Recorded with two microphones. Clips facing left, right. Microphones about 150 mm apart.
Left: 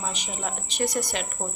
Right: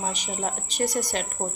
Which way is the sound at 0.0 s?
45° right (ahead or behind).